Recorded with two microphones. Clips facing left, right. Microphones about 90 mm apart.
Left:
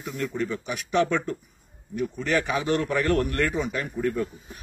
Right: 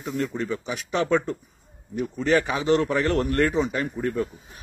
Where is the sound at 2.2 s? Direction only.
25° right (ahead or behind).